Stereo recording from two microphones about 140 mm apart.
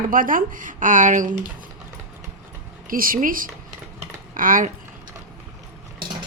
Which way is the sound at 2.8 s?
90° right.